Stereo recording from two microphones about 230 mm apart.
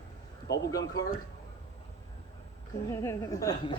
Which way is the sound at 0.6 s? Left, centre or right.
Centre.